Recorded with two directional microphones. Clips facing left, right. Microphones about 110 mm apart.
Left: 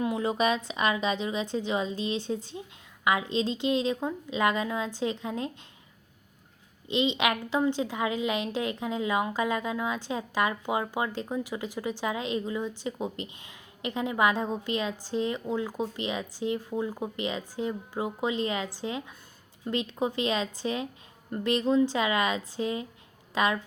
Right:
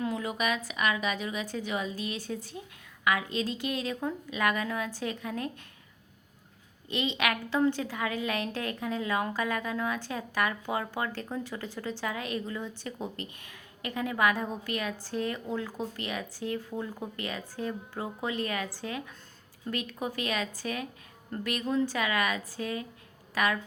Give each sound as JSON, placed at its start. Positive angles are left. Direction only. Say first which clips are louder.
{"t": 0.0, "sound": "speech", "louder": "left 4 dB", "side_deg": 25}
{"t": 6.8, "sound": "speech", "louder": "left 4 dB", "side_deg": 20}